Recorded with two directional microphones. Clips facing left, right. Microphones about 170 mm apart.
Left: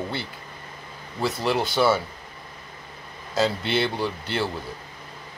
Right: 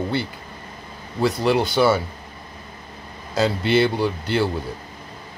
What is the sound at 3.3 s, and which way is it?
Speech, centre (ahead or behind).